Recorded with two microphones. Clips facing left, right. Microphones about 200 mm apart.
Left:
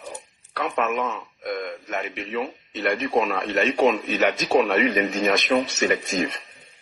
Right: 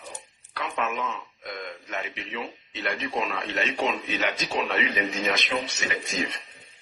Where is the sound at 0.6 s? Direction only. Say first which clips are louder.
Left 5 dB; 50° left (ahead or behind).